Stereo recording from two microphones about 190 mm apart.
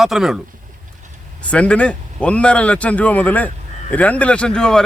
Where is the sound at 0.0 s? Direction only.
Centre (ahead or behind).